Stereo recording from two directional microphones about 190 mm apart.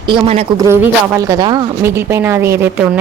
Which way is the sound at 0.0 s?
25° right (ahead or behind).